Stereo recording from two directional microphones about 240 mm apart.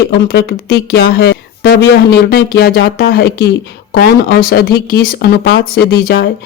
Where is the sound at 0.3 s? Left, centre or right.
Left.